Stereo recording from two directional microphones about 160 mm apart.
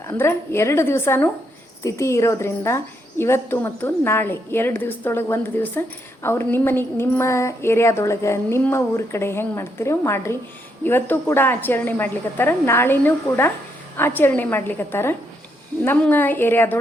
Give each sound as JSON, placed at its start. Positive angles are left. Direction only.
{"t": 0.1, "sound": "a woman's voice", "side_deg": 15}